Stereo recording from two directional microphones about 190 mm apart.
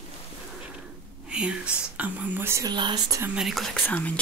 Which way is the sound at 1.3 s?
5° right (ahead or behind).